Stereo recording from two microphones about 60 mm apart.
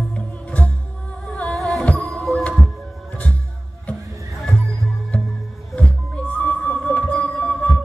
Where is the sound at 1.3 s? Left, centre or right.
Centre.